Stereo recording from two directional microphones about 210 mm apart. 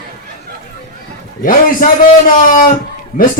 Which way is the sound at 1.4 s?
40° left (ahead or behind).